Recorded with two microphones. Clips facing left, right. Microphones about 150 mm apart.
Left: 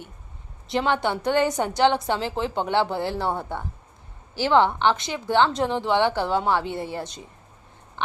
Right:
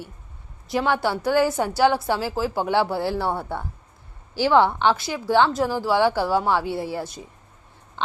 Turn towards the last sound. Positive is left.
turn(degrees=-5)  # may be behind; listen again after turning